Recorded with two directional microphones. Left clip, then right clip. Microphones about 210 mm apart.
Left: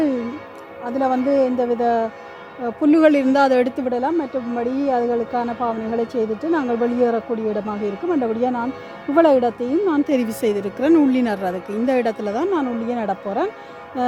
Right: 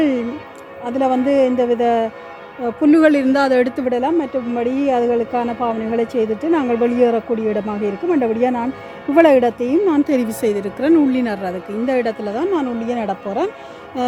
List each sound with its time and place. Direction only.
0.9 s a woman's voice: centre (ahead or behind); by 13.5 s 15° left (ahead or behind)